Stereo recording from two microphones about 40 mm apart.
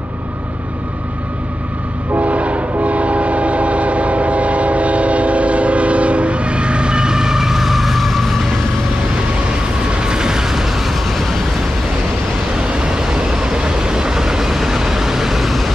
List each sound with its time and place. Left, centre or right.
2.1 s train: right; by 8.4 s centre
9.8 s vehicle: right; by 11.3 s centre
12.5 s vehicle: right; by 15.7 s centre